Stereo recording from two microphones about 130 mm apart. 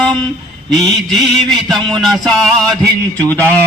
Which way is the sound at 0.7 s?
Centre (ahead or behind).